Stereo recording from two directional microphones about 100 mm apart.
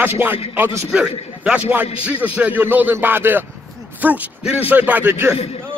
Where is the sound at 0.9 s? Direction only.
10° right (ahead or behind).